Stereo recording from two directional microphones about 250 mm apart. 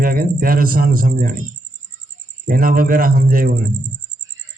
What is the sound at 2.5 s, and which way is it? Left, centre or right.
A man's voice, right.